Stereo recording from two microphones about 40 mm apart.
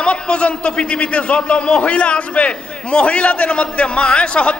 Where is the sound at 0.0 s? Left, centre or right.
Left.